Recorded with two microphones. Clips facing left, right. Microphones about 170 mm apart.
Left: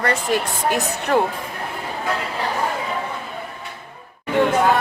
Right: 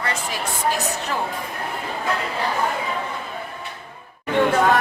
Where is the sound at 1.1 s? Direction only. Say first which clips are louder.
Left 10 dB; 60° left (ahead or behind).